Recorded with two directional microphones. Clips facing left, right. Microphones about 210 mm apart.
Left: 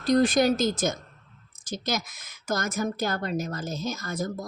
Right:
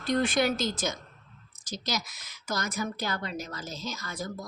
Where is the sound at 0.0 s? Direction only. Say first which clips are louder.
Left 5 dB; 40° left (ahead or behind).